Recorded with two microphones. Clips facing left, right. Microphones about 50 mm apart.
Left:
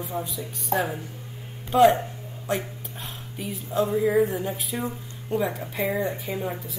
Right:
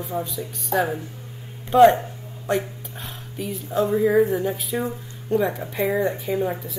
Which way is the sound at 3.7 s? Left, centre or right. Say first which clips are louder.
Right 3 dB; right.